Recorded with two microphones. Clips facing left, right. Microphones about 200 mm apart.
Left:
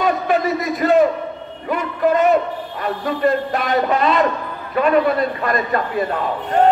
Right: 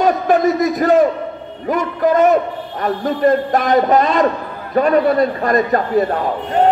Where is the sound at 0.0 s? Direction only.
45° right (ahead or behind).